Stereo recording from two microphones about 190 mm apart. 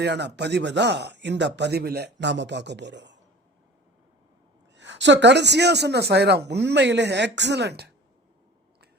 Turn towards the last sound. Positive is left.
turn(degrees=-60)  # may be behind; listen again after turning